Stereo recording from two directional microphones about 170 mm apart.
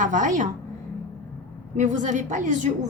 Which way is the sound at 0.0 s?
50° right (ahead or behind).